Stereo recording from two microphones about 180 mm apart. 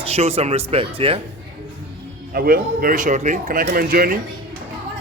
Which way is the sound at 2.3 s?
55° right (ahead or behind).